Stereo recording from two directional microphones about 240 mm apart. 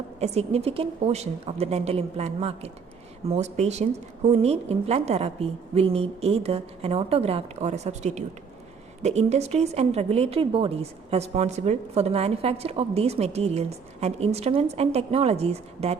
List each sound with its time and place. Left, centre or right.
0.2 s a woman's voice: right